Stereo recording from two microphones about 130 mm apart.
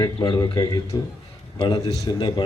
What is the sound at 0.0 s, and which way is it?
A man's voice, 30° left (ahead or behind).